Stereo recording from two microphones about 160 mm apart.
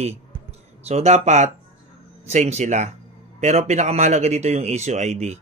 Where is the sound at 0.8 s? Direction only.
45° right (ahead or behind).